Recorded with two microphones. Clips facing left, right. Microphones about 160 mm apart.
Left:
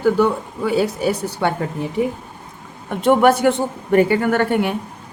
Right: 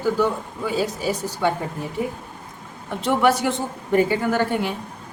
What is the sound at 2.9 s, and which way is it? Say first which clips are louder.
A woman's voice: left 5 dB; 55° left (ahead or behind).